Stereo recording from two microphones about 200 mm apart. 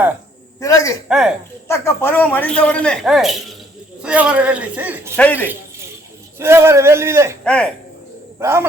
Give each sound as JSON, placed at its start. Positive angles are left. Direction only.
{"t": 0.6, "sound": "speech", "side_deg": 15}
{"t": 1.0, "sound": "speech", "side_deg": -5}
{"t": 1.6, "sound": "a man's voice", "side_deg": 15}
{"t": 5.1, "sound": "speech", "side_deg": 10}
{"t": 6.4, "sound": "a man's voice", "side_deg": -10}
{"t": 7.4, "sound": "speech", "side_deg": 5}
{"t": 8.4, "sound": "a man's voice", "side_deg": -15}